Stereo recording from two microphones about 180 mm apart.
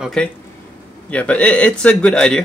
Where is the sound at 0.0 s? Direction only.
5° left (ahead or behind).